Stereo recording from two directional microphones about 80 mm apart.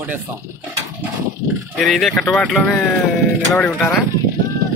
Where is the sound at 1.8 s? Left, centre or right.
Centre.